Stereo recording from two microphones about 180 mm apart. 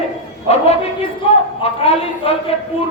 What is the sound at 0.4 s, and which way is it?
Speech, 35° left (ahead or behind).